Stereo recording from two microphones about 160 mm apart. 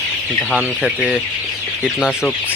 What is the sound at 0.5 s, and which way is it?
Speech, 5° right (ahead or behind).